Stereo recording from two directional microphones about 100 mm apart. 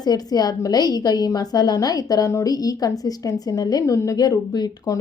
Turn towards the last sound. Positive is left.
turn(degrees=40)  # may be behind; listen again after turning